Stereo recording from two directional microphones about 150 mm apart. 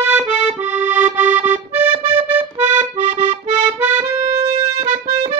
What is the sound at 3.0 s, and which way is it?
Accordion, 55° right (ahead or behind).